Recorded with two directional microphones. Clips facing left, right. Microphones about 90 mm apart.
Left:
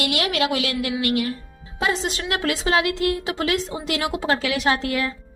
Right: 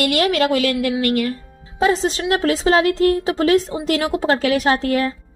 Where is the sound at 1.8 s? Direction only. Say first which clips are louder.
Right 6 dB; 35° right (ahead or behind).